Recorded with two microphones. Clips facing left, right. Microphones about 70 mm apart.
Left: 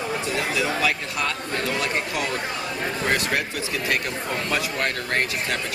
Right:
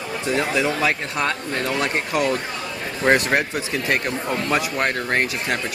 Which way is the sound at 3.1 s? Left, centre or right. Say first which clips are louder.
Right 7 dB; right.